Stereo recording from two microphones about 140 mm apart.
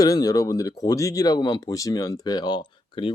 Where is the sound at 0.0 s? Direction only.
25° left (ahead or behind).